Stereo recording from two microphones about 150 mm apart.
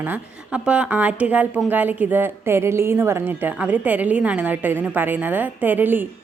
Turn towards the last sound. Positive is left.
turn(degrees=-15)  # may be behind; listen again after turning